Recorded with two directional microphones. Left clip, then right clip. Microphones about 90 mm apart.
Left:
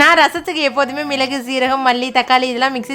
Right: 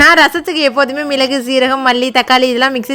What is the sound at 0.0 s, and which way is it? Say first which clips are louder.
A woman's voice: right 3 dB; 45° right (ahead or behind).